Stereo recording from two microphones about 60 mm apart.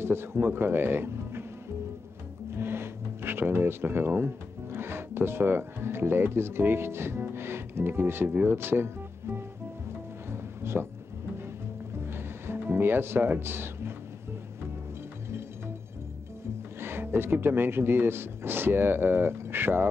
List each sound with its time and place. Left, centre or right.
0.0 s a man's voice: right
2.5 s speech: right
10.3 s music: right
12.0 s music: right
16.8 s speech: right